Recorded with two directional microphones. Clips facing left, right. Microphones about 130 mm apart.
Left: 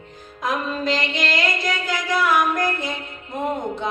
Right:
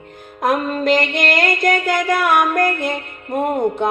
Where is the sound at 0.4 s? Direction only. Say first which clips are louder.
Right 6 dB; 55° right (ahead or behind).